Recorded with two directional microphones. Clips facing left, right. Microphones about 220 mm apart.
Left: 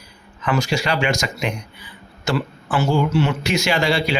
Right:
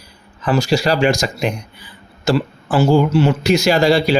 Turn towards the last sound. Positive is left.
turn(degrees=-35)  # may be behind; listen again after turning